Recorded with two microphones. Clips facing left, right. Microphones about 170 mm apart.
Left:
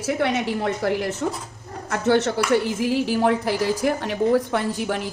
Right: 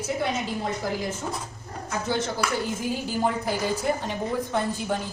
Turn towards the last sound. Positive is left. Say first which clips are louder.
# left 3 dB
turn(degrees=75)  # may be behind; listen again after turning